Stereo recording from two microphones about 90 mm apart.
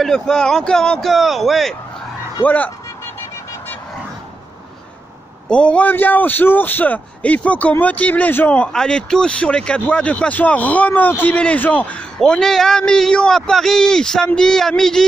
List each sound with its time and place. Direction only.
0.0 s a man's voice: 5° left (ahead or behind)
2.4 s a man's voice: 20° left (ahead or behind)
5.5 s a man's voice: 10° left (ahead or behind)
8.7 s speech: 5° left (ahead or behind)
12.2 s a man's voice: 5° left (ahead or behind)